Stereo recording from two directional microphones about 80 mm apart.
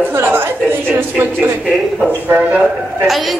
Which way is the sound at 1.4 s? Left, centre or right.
Centre.